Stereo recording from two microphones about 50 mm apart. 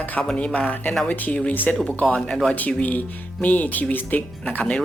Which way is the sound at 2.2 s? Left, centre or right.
Centre.